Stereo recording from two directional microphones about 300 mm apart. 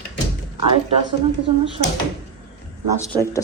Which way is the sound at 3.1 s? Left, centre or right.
Centre.